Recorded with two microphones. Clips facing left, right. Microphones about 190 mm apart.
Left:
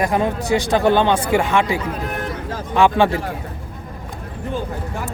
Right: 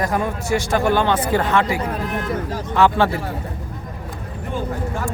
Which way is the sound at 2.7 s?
15° left (ahead or behind).